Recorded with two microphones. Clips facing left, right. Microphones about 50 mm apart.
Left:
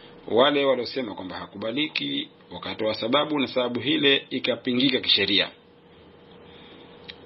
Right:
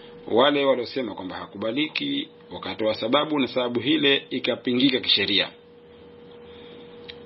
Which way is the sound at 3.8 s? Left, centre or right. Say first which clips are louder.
Right 1 dB; centre.